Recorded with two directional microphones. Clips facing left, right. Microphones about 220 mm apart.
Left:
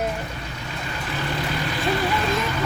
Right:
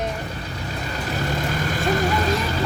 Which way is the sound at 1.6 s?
45° right (ahead or behind).